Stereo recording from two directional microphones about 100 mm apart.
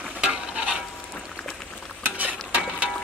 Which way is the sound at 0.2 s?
10° right (ahead or behind).